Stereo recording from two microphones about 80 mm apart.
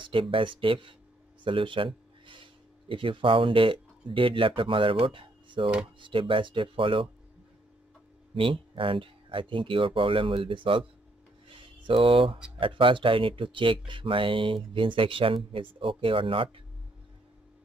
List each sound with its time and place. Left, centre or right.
0.0 s speech: right
8.4 s speech: right
11.4 s a sound: right
12.5 s speech: right